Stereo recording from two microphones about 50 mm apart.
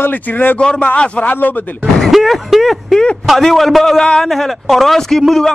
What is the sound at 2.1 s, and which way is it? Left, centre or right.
A man's voice, centre.